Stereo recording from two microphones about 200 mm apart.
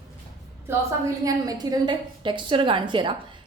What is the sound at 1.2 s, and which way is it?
A woman's voice, 20° right (ahead or behind).